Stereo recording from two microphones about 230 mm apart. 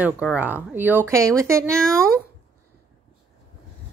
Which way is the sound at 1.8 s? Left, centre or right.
Centre.